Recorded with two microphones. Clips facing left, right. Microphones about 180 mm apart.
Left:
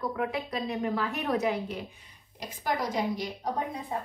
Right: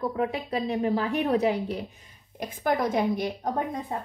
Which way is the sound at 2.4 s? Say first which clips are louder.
Right 5 dB; 55° right (ahead or behind).